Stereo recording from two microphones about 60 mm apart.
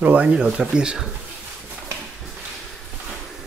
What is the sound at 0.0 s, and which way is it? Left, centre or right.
Speech, right.